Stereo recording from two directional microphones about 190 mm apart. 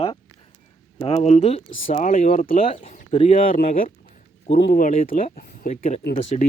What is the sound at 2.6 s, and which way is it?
Speech, 30° left (ahead or behind).